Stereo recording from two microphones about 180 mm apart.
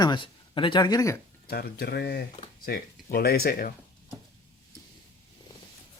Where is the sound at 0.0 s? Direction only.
25° left (ahead or behind).